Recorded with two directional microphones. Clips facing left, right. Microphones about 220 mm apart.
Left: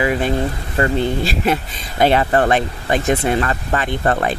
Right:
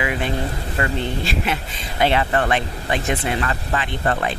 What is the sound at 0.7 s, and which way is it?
Speech, 40° left (ahead or behind).